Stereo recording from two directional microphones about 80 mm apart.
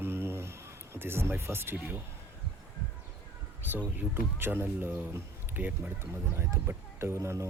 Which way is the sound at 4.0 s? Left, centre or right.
Right.